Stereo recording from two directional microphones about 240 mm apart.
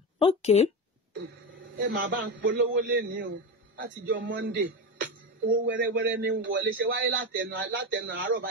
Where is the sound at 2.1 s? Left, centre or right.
Right.